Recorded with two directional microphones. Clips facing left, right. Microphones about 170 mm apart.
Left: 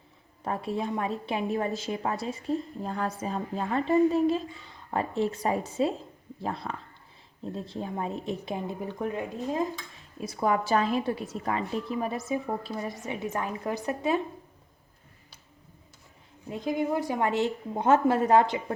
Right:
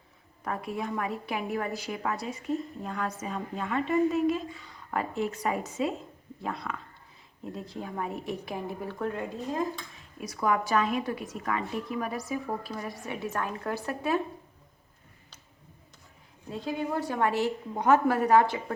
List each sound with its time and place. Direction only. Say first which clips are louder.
0.4 s a woman's voice: left 3 dB; 25° left (ahead or behind)
10.2 s a woman's voice: left 1 dB; 30° left (ahead or behind)
16.5 s a woman's voice: left 3 dB; 15° left (ahead or behind)